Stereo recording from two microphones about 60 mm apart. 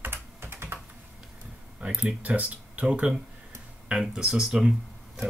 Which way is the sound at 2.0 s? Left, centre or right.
Right.